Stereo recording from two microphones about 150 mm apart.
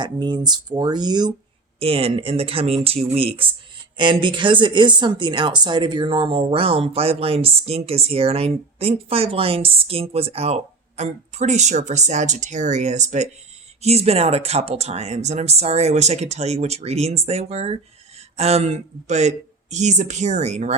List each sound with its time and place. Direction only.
0.0 s speech: 30° right (ahead or behind)
1.8 s speech: 40° right (ahead or behind)